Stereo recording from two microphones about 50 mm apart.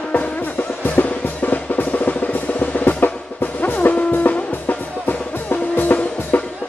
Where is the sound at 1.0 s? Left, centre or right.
Left.